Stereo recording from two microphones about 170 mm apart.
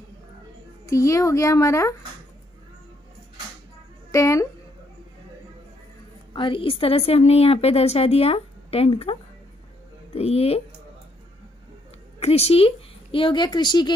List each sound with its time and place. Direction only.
0.8 s speech: 20° left (ahead or behind)
4.1 s a woman's voice: 20° left (ahead or behind)
6.3 s a woman's voice: 30° left (ahead or behind)
12.2 s a woman's voice: 40° left (ahead or behind)